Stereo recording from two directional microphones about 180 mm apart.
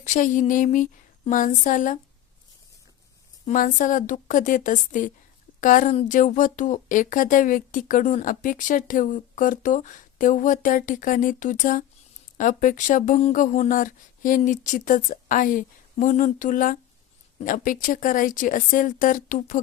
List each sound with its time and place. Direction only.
0.1 s speech: 45° left (ahead or behind)
3.4 s a woman's voice: 45° left (ahead or behind)